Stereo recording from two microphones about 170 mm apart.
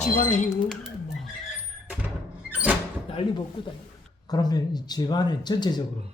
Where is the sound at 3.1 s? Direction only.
30° left (ahead or behind).